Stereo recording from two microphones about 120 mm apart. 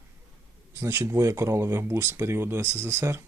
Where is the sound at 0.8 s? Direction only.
25° right (ahead or behind).